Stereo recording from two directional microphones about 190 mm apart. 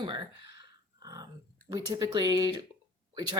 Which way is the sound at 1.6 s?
20° right (ahead or behind).